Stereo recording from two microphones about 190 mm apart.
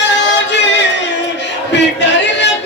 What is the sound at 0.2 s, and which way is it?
Music, 70° left (ahead or behind).